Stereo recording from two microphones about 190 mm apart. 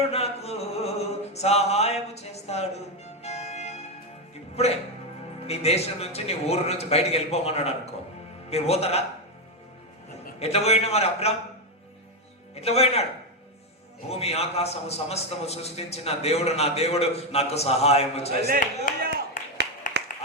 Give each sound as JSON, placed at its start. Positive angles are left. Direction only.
{"t": 0.0, "sound": "music", "side_deg": 35}
{"t": 4.5, "sound": "a man's voice", "side_deg": 35}
{"t": 10.4, "sound": "a man's voice", "side_deg": 35}
{"t": 12.5, "sound": "a man's voice", "side_deg": 35}
{"t": 14.1, "sound": "a man's voice", "side_deg": 35}
{"t": 18.9, "sound": "clapping", "side_deg": 45}